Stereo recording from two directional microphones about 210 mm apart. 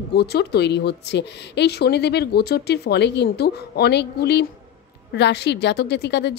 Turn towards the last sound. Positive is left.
turn(degrees=50)  # may be behind; listen again after turning